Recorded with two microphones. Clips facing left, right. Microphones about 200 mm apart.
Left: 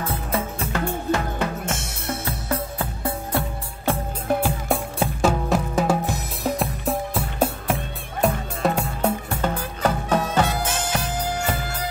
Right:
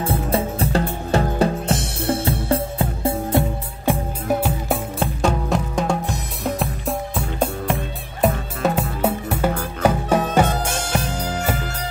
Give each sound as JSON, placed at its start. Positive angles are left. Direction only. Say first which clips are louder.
{"t": 0.0, "sound": "music", "louder": "right 5 dB", "side_deg": -30}
{"t": 4.4, "sound": "music", "louder": "right 1 dB", "side_deg": -5}